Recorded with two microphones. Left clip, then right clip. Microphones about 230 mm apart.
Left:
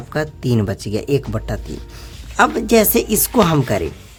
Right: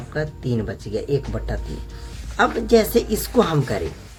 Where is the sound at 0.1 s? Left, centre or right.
Left.